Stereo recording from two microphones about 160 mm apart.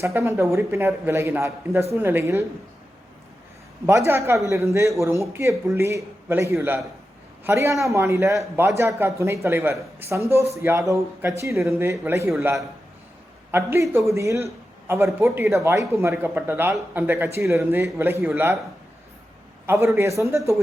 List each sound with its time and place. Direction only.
0.0 s a man's voice: 15° right (ahead or behind)
3.8 s a man's voice: 15° right (ahead or behind)
13.5 s a man's voice: 15° right (ahead or behind)
19.6 s a man's voice: 15° right (ahead or behind)